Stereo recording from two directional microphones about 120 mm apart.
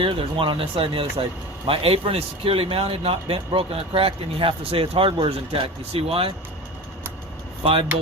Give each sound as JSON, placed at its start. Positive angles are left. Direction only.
{"t": 0.0, "sound": "a man's voice", "side_deg": -45}
{"t": 7.6, "sound": "a man's voice", "side_deg": -50}